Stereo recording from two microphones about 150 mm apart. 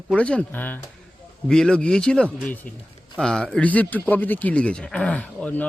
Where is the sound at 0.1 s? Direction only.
5° left (ahead or behind).